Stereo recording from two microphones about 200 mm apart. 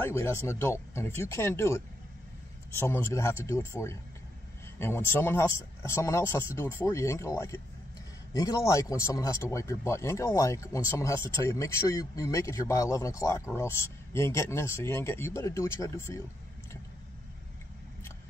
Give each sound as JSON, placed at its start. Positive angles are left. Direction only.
{"t": 0.0, "sound": "speech", "side_deg": 15}